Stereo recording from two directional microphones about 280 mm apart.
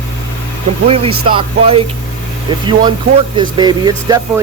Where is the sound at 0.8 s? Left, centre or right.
Centre.